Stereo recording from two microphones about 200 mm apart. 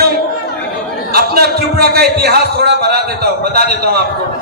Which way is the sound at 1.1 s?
50° right (ahead or behind).